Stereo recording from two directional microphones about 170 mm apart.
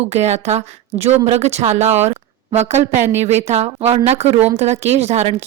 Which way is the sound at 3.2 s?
40° right (ahead or behind).